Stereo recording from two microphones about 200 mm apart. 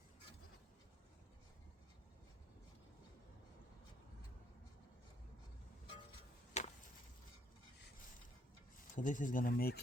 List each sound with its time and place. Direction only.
6.5 s chop: 35° left (ahead or behind)
9.0 s speech: 40° left (ahead or behind)